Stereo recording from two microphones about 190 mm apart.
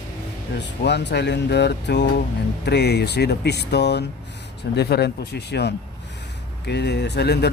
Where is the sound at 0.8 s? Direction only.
65° left (ahead or behind).